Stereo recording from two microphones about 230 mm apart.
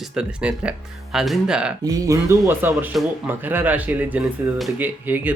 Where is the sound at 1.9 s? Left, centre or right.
Centre.